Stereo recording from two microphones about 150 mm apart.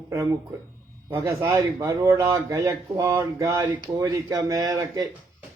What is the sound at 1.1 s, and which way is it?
A man's voice, 20° right (ahead or behind).